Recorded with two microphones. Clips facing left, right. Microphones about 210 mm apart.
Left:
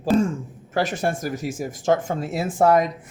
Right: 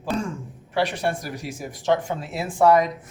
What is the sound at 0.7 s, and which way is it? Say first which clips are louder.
Speech: left 1 dB; 45° left (ahead or behind).